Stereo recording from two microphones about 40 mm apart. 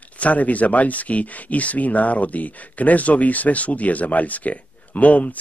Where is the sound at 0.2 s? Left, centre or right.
Left.